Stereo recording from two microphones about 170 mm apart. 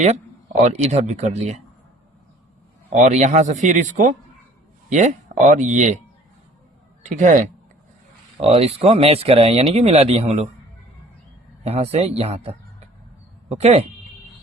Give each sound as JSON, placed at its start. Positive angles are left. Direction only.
{"t": 0.6, "sound": "speech", "side_deg": -40}
{"t": 3.0, "sound": "speech", "side_deg": -45}
{"t": 7.0, "sound": "speech", "side_deg": -45}
{"t": 8.4, "sound": "speech", "side_deg": -35}
{"t": 11.6, "sound": "speech", "side_deg": -35}